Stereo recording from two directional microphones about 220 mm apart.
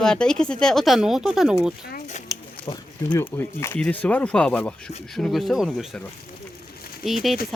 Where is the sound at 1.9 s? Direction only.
35° left (ahead or behind).